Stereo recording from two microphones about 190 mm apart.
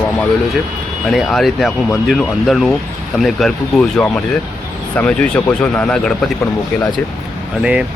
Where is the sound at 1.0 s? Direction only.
Centre (ahead or behind).